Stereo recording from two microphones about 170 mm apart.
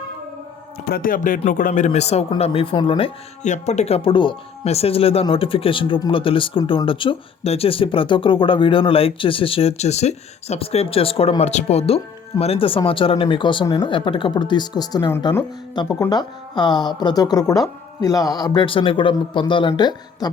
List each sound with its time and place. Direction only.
0.9 s speech: 60° left (ahead or behind); by 3.1 s 30° left (ahead or behind)
3.4 s speech: 40° left (ahead or behind); by 20.3 s 25° left (ahead or behind)